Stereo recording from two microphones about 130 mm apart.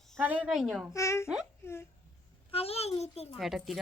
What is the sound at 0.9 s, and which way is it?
Speech, 20° left (ahead or behind).